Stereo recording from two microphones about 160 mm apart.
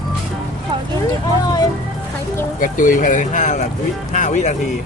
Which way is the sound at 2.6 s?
55° left (ahead or behind).